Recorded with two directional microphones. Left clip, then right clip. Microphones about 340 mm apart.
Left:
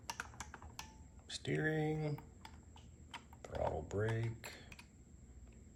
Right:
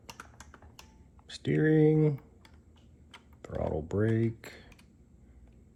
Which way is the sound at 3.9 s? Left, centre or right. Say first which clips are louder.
Right 10 dB; right.